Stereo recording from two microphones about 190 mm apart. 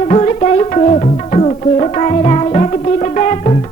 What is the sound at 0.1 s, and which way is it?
Music, 35° left (ahead or behind).